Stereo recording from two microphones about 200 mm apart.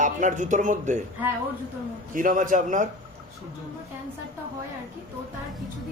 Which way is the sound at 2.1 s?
40° right (ahead or behind).